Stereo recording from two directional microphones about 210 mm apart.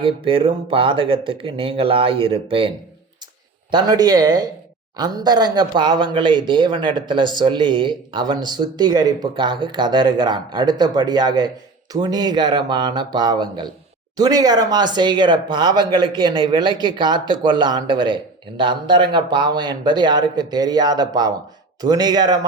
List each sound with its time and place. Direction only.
0.0 s speech: 25° right (ahead or behind)